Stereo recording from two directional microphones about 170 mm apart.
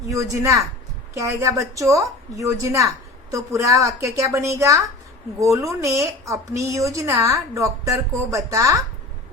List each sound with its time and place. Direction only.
0.1 s speech: 20° right (ahead or behind)